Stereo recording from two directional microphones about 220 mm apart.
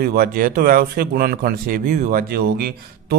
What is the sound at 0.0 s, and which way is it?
Speech, 45° right (ahead or behind).